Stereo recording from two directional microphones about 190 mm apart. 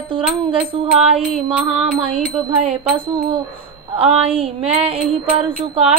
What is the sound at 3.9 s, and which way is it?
Music, 30° right (ahead or behind).